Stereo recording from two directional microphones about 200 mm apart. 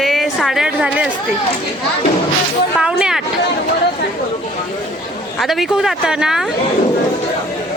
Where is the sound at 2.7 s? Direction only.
5° right (ahead or behind).